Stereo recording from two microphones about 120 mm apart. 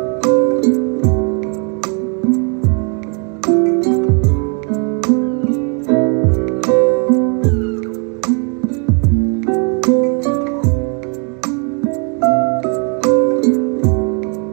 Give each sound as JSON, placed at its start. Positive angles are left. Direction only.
{"t": 0.3, "sound": "music", "side_deg": -15}
{"t": 3.4, "sound": "music", "side_deg": -20}
{"t": 9.5, "sound": "music", "side_deg": -20}
{"t": 12.2, "sound": "music", "side_deg": -15}